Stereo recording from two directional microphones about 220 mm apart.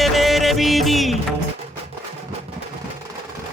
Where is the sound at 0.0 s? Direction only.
Centre (ahead or behind).